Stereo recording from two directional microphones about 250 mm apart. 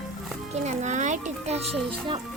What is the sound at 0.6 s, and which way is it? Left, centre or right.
Speech, right.